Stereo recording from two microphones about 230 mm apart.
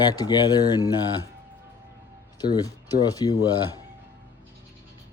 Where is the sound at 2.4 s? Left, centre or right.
Centre.